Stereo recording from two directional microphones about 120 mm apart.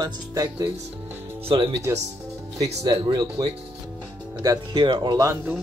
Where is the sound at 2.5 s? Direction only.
30° right (ahead or behind).